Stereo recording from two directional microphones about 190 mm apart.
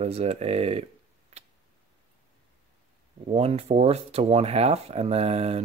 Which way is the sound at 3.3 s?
35° right (ahead or behind).